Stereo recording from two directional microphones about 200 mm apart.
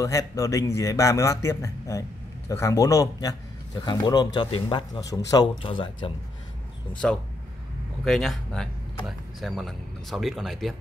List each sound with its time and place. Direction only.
0.0 s a man's voice: 15° left (ahead or behind)
6.9 s speech: 5° left (ahead or behind)